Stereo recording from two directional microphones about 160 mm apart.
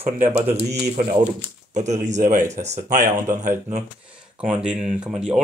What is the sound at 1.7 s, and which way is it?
Speech, 45° right (ahead or behind).